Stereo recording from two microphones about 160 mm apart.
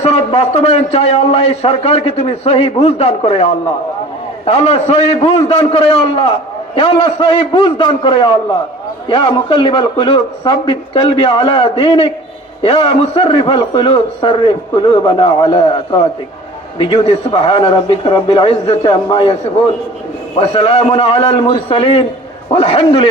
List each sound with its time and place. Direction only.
0.0 s a man's voice: 40° left (ahead or behind)
20.4 s a man's voice: 35° left (ahead or behind)